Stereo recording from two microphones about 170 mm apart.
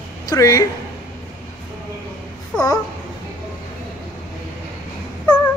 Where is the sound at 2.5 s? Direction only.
5° left (ahead or behind).